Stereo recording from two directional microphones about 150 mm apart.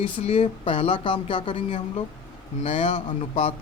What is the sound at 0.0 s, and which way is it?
Speech, 40° left (ahead or behind).